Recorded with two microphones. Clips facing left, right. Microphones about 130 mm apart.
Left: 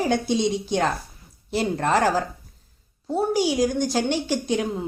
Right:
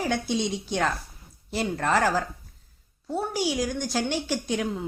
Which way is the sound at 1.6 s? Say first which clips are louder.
Left 3 dB; 30° left (ahead or behind).